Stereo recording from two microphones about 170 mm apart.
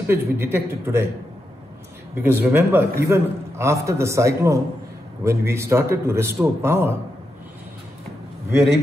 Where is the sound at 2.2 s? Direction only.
15° right (ahead or behind).